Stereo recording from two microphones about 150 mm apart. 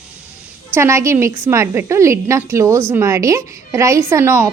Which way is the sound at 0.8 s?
20° right (ahead or behind).